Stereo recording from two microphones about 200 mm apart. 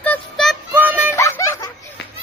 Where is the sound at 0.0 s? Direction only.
5° left (ahead or behind).